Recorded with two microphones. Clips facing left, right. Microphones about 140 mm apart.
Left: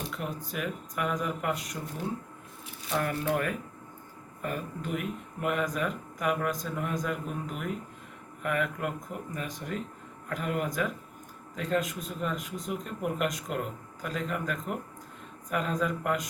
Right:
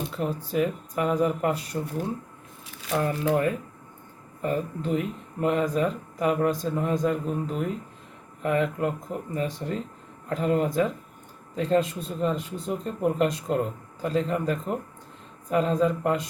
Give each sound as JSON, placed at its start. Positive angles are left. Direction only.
{"t": 0.1, "sound": "speech", "side_deg": -30}
{"t": 3.0, "sound": "speech", "side_deg": -25}